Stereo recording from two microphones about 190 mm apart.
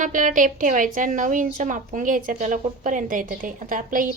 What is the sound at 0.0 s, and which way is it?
A woman's voice, 45° right (ahead or behind).